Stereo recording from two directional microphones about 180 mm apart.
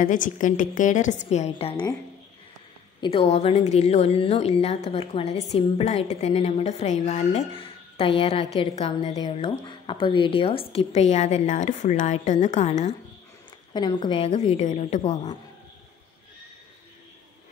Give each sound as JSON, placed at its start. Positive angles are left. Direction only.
{"t": 0.0, "sound": "a woman's voice", "side_deg": 45}
{"t": 3.0, "sound": "a woman's voice", "side_deg": 35}
{"t": 13.7, "sound": "a woman's voice", "side_deg": 25}